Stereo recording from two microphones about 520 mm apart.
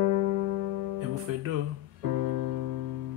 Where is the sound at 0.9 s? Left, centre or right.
Right.